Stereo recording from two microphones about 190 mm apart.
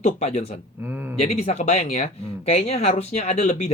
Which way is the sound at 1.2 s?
35° left (ahead or behind).